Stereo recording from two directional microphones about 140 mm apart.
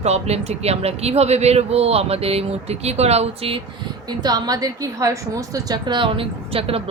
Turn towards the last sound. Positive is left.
turn(degrees=-45)  # may be behind; listen again after turning